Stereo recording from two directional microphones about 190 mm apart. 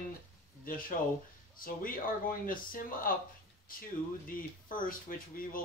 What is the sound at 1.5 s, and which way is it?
Speech, 50° left (ahead or behind).